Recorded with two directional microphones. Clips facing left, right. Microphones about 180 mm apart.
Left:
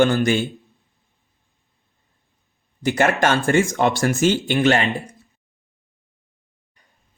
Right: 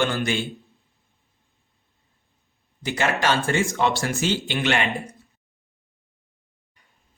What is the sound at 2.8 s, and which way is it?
Speech, 50° left (ahead or behind).